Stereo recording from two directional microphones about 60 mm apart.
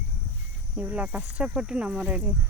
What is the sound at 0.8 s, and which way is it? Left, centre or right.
Speech, right.